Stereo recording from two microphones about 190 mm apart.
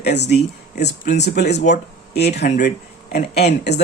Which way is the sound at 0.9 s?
35° left (ahead or behind).